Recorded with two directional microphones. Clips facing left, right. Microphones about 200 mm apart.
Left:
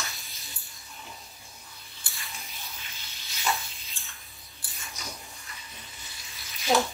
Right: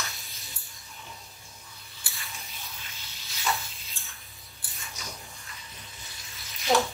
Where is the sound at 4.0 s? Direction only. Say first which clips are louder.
Even; 15° left (ahead or behind).